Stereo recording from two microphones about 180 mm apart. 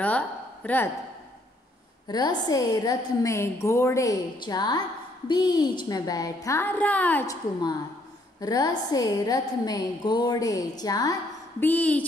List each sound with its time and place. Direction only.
0.0 s a woman's voice: 10° left (ahead or behind)
2.0 s a woman's voice: 20° left (ahead or behind)
8.4 s a woman's voice: 20° left (ahead or behind)
11.6 s a woman's voice: 10° left (ahead or behind)